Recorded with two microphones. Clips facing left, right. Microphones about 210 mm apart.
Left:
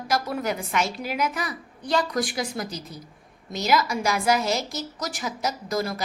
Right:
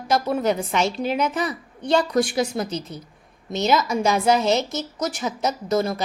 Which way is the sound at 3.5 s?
25° right (ahead or behind).